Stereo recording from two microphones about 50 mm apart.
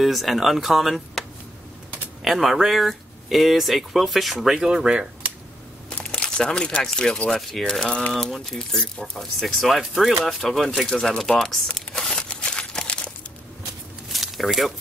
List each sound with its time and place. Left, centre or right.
0.0 s speech: centre
2.2 s speech: centre
5.9 s crumpling: centre
7.2 s speech: centre
7.8 s a sound: centre
8.5 s speech: centre
11.6 s crumpling: centre
12.3 s a sound: centre
14.1 s a sound: centre